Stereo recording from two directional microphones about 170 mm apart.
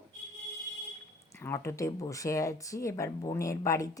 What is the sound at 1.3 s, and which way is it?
Speech, 15° left (ahead or behind).